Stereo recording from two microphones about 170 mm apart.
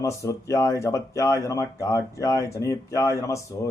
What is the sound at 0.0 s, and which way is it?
Speech, 20° left (ahead or behind).